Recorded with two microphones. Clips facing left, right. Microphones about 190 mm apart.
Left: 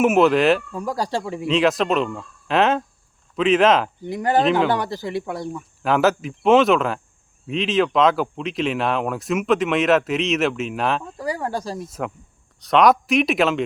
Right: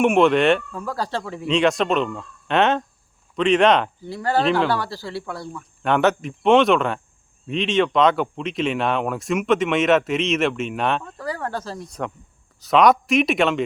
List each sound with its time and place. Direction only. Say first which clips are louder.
0.0 s speech: even; 5° left (ahead or behind)
0.7 s speech: left 2 dB; 15° left (ahead or behind)
1.5 s speech: even; centre (ahead or behind)
4.0 s speech: left 2 dB; 20° left (ahead or behind)
5.8 s speech: even; centre (ahead or behind)
11.2 s speech: left 2 dB; 15° left (ahead or behind)